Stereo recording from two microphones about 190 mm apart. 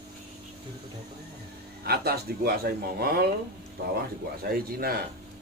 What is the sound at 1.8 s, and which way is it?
Speech, 55° right (ahead or behind).